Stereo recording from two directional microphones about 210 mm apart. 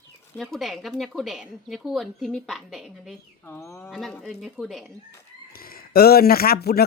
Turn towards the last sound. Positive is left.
turn(degrees=50)  # may be behind; listen again after turning